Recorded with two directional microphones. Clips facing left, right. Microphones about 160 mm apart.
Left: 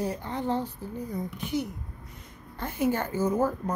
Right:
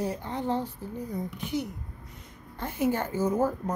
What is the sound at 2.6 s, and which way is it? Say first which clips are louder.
Speech: even; 20° right (ahead or behind).